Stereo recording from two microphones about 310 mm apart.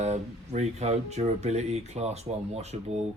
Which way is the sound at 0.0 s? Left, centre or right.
Right.